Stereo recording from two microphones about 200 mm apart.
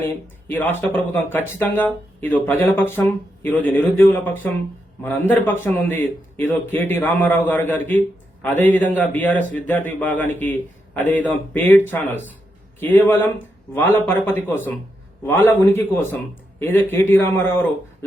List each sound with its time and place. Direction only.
0.0 s a man's voice: 10° left (ahead or behind)